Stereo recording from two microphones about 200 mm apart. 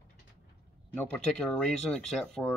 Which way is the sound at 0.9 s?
5° left (ahead or behind).